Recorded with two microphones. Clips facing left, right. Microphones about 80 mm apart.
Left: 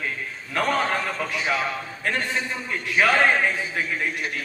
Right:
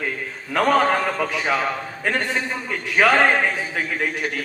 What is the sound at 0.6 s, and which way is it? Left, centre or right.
A man's voice, right.